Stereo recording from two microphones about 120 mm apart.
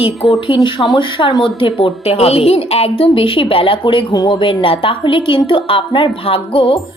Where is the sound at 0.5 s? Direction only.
35° left (ahead or behind).